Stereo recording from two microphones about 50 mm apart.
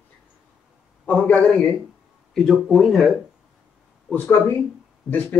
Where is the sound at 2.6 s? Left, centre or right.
Centre.